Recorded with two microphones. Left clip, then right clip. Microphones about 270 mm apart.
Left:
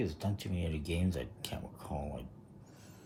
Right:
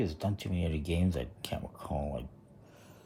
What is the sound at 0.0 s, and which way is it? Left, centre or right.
Speech, right.